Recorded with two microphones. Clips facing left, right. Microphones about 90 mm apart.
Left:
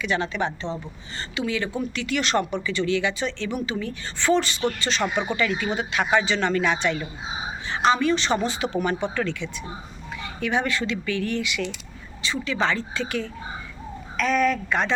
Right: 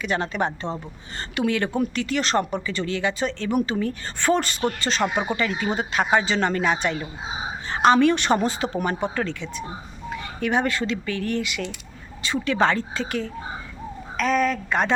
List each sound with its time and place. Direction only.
0.0 s speech: 45° right (ahead or behind)
7.7 s speech: 50° right (ahead or behind)